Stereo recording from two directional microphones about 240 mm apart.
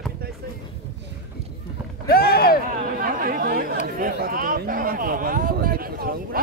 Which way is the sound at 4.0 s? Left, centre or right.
Right.